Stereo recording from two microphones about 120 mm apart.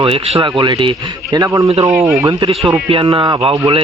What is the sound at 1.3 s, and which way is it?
Speech, 30° right (ahead or behind).